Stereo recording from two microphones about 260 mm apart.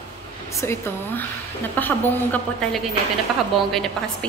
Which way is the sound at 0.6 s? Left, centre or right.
Centre.